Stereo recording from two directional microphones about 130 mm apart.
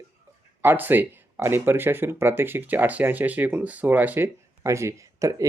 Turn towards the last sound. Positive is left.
turn(degrees=-25)  # may be behind; listen again after turning